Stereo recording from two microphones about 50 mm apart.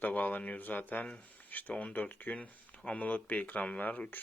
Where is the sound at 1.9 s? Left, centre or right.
Left.